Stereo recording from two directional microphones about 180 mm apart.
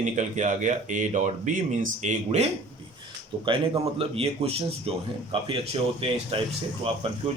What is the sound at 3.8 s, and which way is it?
A man's voice, 35° right (ahead or behind).